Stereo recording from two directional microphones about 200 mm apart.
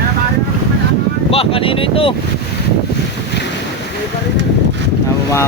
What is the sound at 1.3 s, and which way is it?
Speech, 25° left (ahead or behind).